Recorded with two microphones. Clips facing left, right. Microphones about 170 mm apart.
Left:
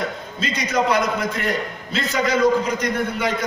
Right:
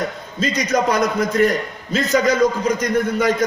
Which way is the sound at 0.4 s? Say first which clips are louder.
Right 3 dB; 40° right (ahead or behind).